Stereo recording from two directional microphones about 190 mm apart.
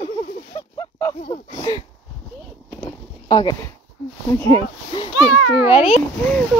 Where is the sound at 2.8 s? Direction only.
25° left (ahead or behind).